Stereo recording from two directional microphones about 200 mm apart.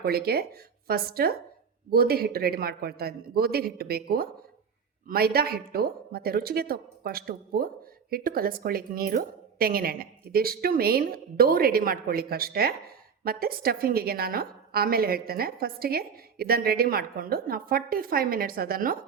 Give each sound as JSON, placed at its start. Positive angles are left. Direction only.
{"t": 0.0, "sound": "a woman's voice", "side_deg": -50}